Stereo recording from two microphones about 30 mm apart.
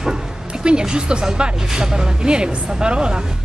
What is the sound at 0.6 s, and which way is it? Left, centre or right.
Speech, right.